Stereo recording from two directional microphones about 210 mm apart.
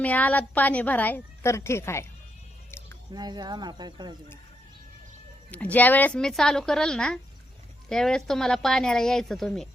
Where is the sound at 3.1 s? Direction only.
20° right (ahead or behind).